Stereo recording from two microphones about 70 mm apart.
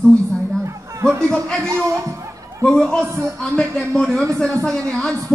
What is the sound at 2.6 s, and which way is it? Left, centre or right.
A man's voice, centre.